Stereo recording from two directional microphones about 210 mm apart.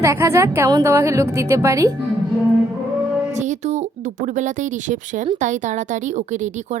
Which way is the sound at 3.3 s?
35° right (ahead or behind).